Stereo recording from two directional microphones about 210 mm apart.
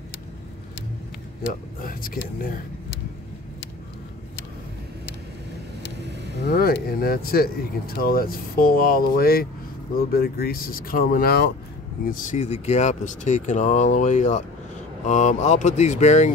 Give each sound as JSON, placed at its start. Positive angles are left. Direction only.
{"t": 1.8, "sound": "speech", "side_deg": 40}
{"t": 6.5, "sound": "speech", "side_deg": 45}